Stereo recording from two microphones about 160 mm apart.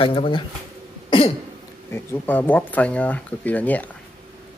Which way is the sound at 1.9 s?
15° left (ahead or behind).